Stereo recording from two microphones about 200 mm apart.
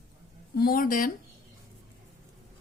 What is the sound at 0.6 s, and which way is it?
Speech, 45° left (ahead or behind).